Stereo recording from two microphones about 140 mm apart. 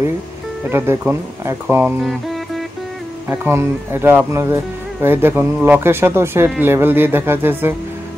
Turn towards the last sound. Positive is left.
turn(degrees=-15)  # may be behind; listen again after turning